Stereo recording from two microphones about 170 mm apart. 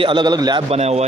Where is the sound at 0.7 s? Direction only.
35° right (ahead or behind).